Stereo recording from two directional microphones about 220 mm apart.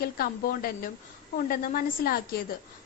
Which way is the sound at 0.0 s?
40° left (ahead or behind).